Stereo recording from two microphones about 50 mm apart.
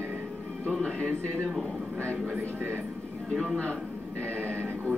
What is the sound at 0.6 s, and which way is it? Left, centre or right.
Speech, centre.